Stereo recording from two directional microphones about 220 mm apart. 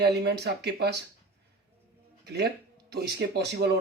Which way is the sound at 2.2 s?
50° right (ahead or behind).